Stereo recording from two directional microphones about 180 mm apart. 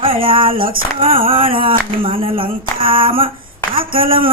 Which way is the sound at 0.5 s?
55° right (ahead or behind).